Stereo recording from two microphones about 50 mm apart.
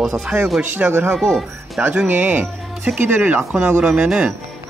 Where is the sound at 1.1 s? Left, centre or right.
Centre.